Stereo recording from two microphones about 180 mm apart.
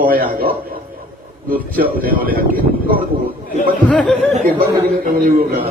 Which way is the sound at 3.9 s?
5° left (ahead or behind).